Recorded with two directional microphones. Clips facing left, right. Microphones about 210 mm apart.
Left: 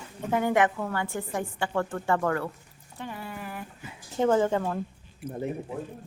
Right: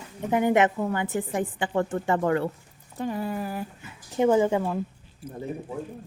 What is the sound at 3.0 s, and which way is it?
Speech, 40° right (ahead or behind).